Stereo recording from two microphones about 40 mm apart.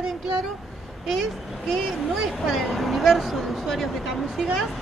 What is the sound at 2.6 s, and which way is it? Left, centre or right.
Speech, centre.